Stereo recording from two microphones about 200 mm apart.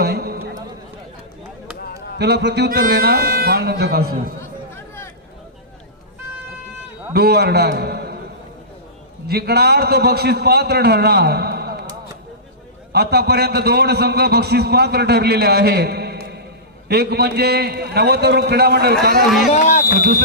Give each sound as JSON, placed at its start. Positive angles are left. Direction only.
{"t": 0.0, "sound": "a sound", "side_deg": -50}
{"t": 2.1, "sound": "a man's voice", "side_deg": -55}
{"t": 7.1, "sound": "a man's voice", "side_deg": -55}
{"t": 9.2, "sound": "a man's voice", "side_deg": -50}
{"t": 12.9, "sound": "a man's voice", "side_deg": -55}
{"t": 19.5, "sound": "speech", "side_deg": 40}
{"t": 20.0, "sound": "a man's voice", "side_deg": -50}